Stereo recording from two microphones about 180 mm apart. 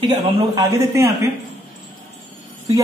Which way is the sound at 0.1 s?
20° right (ahead or behind).